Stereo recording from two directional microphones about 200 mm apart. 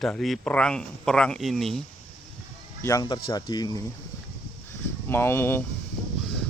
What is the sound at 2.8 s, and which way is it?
Speech, 20° left (ahead or behind).